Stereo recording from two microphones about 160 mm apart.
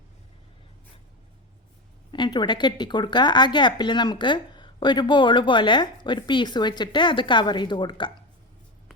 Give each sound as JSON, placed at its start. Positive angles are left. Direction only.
{"t": 2.1, "sound": "speech", "side_deg": 30}